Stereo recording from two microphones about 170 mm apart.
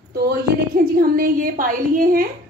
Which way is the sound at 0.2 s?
65° right (ahead or behind).